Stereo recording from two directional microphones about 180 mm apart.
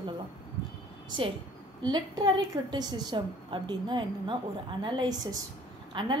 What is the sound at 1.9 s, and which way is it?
A woman's voice, 25° right (ahead or behind).